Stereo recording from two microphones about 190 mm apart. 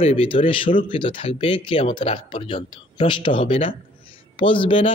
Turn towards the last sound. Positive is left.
turn(degrees=25)  # may be behind; listen again after turning